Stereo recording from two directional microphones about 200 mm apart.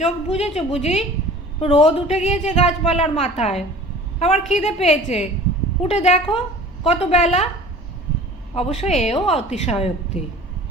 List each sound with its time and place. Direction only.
0.0 s a woman's voice: 30° left (ahead or behind)
8.5 s a woman's voice: 30° left (ahead or behind)